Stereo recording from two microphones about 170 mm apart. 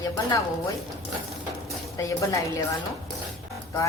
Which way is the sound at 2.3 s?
20° left (ahead or behind).